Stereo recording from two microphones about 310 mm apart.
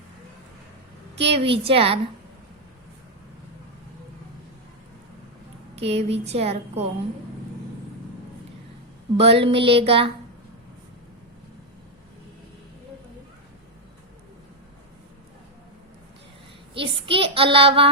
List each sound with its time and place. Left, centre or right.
1.2 s a child's voice: centre
5.7 s speech: centre
9.1 s a child's voice: centre
16.7 s a child's voice: centre